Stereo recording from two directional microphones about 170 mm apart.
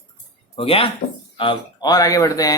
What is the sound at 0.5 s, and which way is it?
Speech, 35° left (ahead or behind).